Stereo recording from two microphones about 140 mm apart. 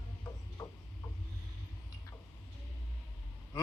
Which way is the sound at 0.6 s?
25° left (ahead or behind).